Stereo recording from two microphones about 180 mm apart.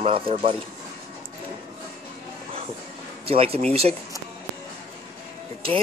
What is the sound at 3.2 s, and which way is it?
Speech, 30° right (ahead or behind).